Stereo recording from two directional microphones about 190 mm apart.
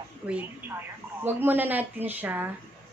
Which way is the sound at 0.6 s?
10° right (ahead or behind).